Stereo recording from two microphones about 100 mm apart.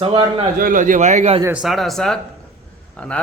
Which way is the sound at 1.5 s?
5° right (ahead or behind).